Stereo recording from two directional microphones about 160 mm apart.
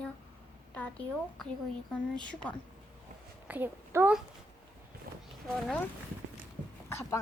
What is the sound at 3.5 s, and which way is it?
Speech, 10° right (ahead or behind).